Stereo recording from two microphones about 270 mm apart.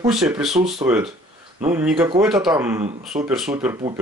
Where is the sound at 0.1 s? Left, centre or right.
Centre.